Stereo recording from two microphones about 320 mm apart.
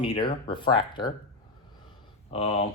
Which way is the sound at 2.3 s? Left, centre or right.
Centre.